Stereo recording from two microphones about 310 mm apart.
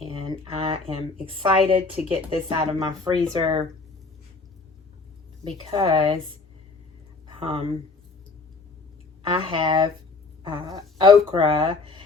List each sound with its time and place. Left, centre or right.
0.0 s speech: centre
5.4 s speech: centre
7.3 s speech: centre
9.3 s speech: centre